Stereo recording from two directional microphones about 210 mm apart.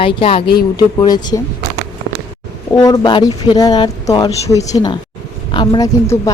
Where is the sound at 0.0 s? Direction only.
25° left (ahead or behind).